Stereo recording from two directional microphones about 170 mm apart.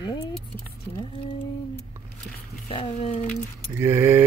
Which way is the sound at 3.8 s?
15° right (ahead or behind).